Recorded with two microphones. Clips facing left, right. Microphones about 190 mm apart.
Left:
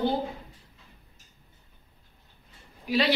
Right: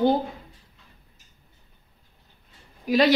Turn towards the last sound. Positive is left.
turn(degrees=-45)  # may be behind; listen again after turning